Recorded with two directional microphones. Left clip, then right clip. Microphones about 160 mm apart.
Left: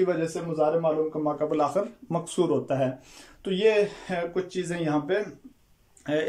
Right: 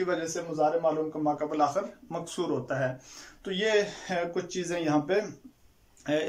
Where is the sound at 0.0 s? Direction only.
10° left (ahead or behind).